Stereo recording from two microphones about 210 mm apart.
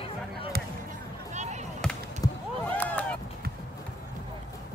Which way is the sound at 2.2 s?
15° left (ahead or behind).